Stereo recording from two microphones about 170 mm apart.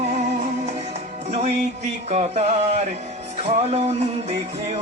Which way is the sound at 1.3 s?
40° right (ahead or behind).